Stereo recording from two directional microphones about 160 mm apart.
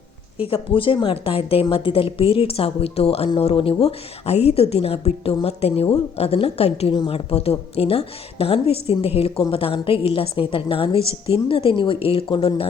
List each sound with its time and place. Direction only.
0.4 s a woman's voice: 35° left (ahead or behind)